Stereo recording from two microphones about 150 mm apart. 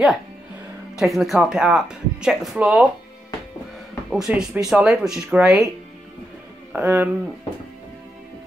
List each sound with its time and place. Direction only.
0.9 s speech: centre (ahead or behind)
4.1 s speech: 5° right (ahead or behind)
6.7 s speech: 10° right (ahead or behind)